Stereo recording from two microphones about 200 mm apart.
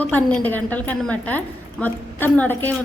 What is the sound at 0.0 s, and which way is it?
A woman's voice, 10° left (ahead or behind).